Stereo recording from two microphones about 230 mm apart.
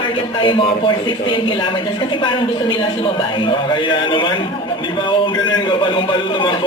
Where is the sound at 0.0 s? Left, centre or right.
Left.